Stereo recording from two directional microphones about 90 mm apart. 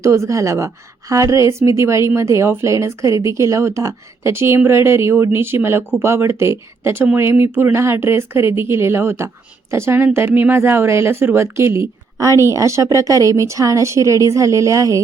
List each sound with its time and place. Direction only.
0.0 s a woman's voice: 35° right (ahead or behind)